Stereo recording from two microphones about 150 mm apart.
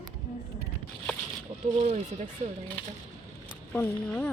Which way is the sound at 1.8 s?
45° right (ahead or behind).